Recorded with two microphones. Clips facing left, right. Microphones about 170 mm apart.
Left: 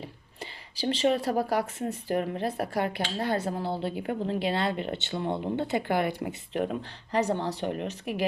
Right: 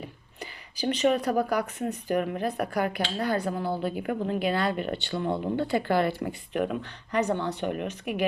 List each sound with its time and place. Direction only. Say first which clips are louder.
0.0 s speech: right 1 dB; 30° left (ahead or behind)
6.5 s speech: right 1 dB; 30° left (ahead or behind)